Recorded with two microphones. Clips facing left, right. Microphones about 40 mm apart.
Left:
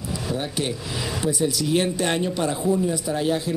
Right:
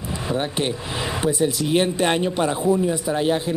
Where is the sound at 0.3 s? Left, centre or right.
Right.